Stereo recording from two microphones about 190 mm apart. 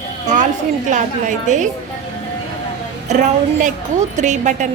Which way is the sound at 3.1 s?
40° right (ahead or behind).